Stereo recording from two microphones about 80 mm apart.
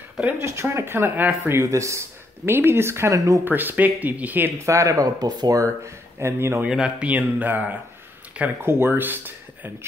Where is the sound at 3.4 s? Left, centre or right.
Right.